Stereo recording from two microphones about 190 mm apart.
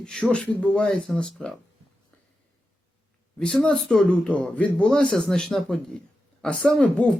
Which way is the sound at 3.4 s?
5° left (ahead or behind).